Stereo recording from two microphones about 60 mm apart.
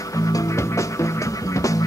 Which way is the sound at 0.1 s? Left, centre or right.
Left.